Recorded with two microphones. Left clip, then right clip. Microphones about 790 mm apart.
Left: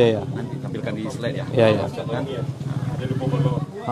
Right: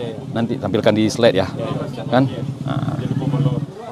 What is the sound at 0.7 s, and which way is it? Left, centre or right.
Speech, right.